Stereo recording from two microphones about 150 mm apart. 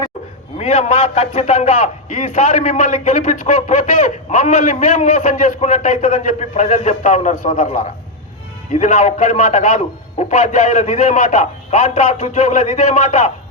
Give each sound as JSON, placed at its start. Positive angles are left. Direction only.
{"t": 0.6, "sound": "a man's voice", "side_deg": 50}